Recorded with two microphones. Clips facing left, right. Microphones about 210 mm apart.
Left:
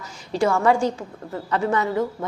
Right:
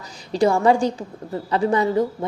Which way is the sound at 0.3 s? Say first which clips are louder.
Right 2 dB; 35° right (ahead or behind).